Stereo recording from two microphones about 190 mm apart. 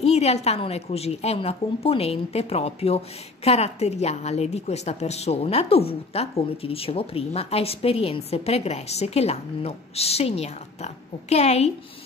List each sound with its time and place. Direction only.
0.0 s a woman's voice: 35° left (ahead or behind)